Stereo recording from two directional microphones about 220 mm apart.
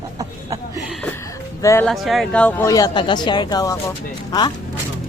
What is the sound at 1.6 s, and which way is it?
Speech, 15° left (ahead or behind).